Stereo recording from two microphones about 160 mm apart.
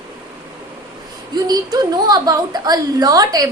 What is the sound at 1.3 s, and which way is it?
A woman's voice, 25° right (ahead or behind).